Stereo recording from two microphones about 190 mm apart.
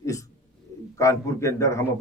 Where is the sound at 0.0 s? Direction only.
15° left (ahead or behind).